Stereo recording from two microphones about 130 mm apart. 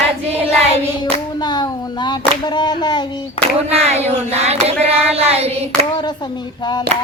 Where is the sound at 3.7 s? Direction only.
55° right (ahead or behind).